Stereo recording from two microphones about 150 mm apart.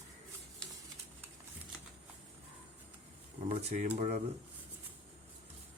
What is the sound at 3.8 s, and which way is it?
Speech, 65° right (ahead or behind).